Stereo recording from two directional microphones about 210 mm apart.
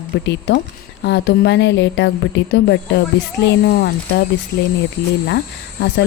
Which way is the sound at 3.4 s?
55° left (ahead or behind).